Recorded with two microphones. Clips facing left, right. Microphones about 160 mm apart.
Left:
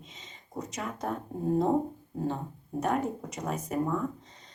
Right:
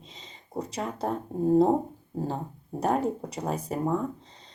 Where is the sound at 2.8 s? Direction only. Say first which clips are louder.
Right 3 dB; 30° right (ahead or behind).